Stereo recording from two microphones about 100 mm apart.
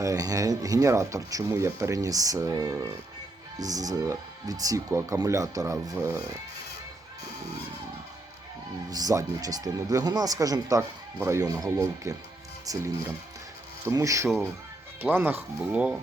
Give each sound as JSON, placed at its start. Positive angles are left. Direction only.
{"t": 0.0, "sound": "speech", "side_deg": -35}
{"t": 8.9, "sound": "speech", "side_deg": -40}
{"t": 15.0, "sound": "speech", "side_deg": -20}